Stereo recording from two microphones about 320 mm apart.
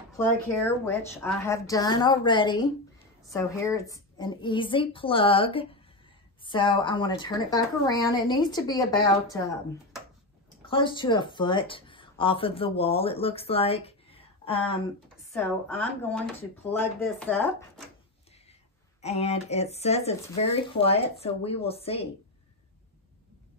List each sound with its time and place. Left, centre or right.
0.1 s speech: centre
10.6 s speech: centre
15.3 s speech: centre
18.9 s speech: centre